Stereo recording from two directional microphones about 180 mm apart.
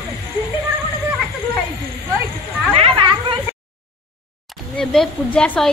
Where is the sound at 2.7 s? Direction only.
30° right (ahead or behind).